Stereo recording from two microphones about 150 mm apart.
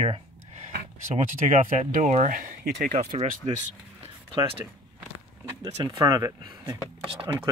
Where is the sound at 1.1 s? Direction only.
55° right (ahead or behind); by 3.0 s 70° right (ahead or behind).